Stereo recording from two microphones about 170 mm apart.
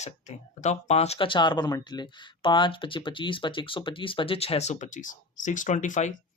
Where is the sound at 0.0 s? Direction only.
40° left (ahead or behind).